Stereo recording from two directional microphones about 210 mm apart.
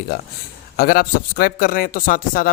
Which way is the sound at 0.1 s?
45° left (ahead or behind).